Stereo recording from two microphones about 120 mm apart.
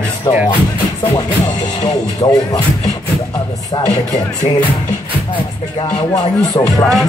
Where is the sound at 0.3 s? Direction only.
30° left (ahead or behind).